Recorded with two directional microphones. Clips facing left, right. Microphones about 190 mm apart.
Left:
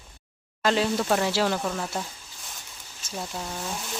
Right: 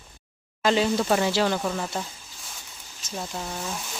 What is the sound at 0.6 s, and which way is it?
Speech, centre (ahead or behind).